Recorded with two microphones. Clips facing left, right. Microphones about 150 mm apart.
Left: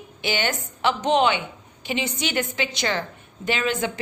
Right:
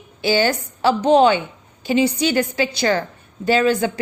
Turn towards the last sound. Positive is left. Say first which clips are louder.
# right 8 dB
turn(degrees=-35)  # may be behind; listen again after turning